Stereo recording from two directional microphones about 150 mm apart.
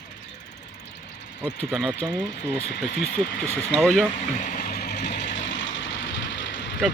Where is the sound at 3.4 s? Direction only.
15° left (ahead or behind).